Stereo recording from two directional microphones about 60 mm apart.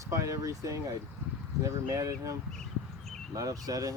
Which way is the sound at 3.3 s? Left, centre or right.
Right.